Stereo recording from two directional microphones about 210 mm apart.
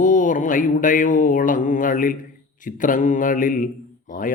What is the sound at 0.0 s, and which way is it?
Mantra, 40° left (ahead or behind).